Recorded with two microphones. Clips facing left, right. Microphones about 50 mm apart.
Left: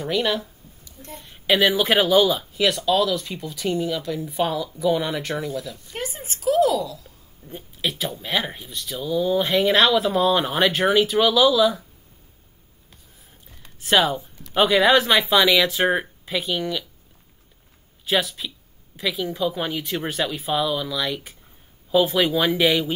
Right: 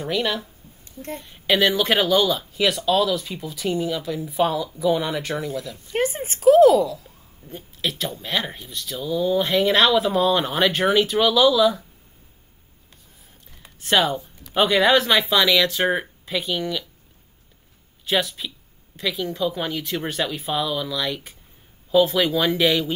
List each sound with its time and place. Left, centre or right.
0.0 s speech: centre
5.9 s a woman's voice: right
7.4 s speech: centre
13.6 s speech: centre
18.0 s speech: centre